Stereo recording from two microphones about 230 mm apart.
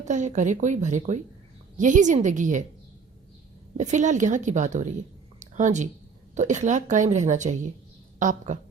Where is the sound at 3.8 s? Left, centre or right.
Right.